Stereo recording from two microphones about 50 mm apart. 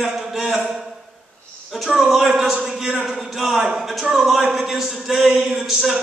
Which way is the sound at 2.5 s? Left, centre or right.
Centre.